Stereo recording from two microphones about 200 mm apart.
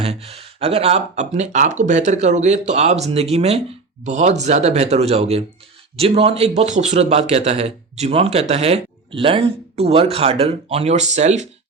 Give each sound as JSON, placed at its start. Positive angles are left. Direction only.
{"t": 0.0, "sound": "speech", "side_deg": -30}